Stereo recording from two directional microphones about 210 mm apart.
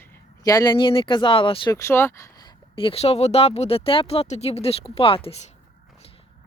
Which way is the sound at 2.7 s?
25° left (ahead or behind).